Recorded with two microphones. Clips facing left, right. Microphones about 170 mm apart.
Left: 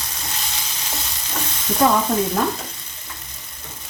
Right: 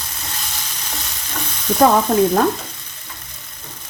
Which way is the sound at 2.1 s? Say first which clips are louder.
Right 6 dB; 55° right (ahead or behind).